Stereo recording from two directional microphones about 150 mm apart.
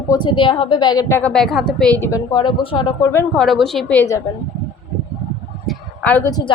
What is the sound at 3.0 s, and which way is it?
Speech, 15° left (ahead or behind).